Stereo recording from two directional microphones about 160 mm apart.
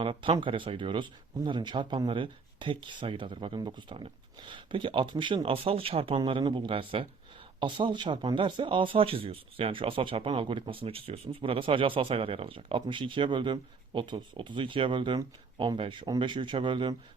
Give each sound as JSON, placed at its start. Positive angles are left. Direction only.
{"t": 0.0, "sound": "speech", "side_deg": -35}